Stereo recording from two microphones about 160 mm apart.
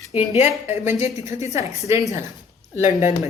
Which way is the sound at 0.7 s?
15° right (ahead or behind).